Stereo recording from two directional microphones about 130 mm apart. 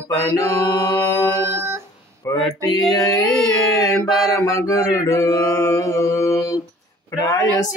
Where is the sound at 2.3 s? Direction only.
25° left (ahead or behind).